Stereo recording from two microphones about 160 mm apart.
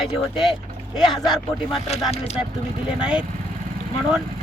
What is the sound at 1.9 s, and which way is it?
Speech, 40° left (ahead or behind).